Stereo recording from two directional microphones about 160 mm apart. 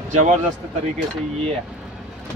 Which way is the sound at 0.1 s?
50° right (ahead or behind).